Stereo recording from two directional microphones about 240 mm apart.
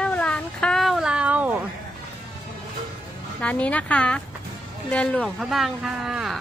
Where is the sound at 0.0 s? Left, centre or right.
Centre.